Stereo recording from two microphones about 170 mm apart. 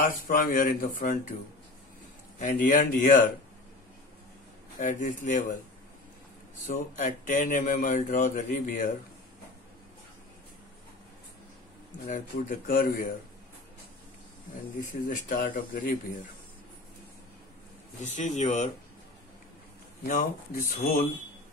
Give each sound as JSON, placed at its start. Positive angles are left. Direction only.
{"t": 0.0, "sound": "speech", "side_deg": 55}
{"t": 2.3, "sound": "speech", "side_deg": 50}
{"t": 4.7, "sound": "speech", "side_deg": 50}
{"t": 6.6, "sound": "speech", "side_deg": 50}
{"t": 12.1, "sound": "speech", "side_deg": 55}
{"t": 14.9, "sound": "speech", "side_deg": 55}
{"t": 18.0, "sound": "speech", "side_deg": 45}
{"t": 20.1, "sound": "speech", "side_deg": 55}